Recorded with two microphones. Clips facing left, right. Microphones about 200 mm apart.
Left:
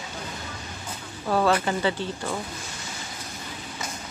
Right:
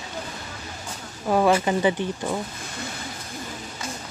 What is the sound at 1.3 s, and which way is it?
Speech, 10° right (ahead or behind).